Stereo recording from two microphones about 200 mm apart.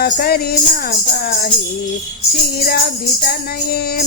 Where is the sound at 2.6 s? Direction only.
50° left (ahead or behind).